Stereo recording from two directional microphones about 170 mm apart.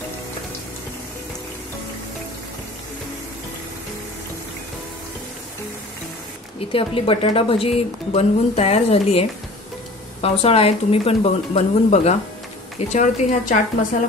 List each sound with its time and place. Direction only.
6.7 s a woman's voice: 30° left (ahead or behind)
10.2 s a woman's voice: 35° left (ahead or behind)